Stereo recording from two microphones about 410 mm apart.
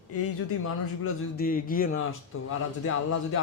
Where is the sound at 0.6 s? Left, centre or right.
Left.